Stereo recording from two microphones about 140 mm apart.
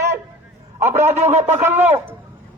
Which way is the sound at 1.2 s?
55° right (ahead or behind).